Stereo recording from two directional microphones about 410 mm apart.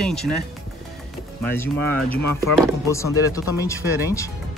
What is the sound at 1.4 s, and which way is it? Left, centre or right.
Speech, centre.